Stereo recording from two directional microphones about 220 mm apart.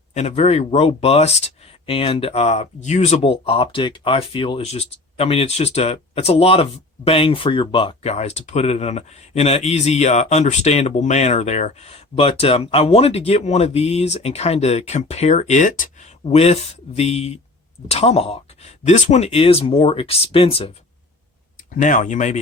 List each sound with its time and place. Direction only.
0.1 s speech: 30° left (ahead or behind)
21.8 s speech: 35° left (ahead or behind)